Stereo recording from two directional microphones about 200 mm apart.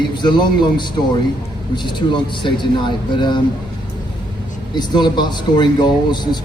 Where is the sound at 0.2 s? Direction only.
20° left (ahead or behind).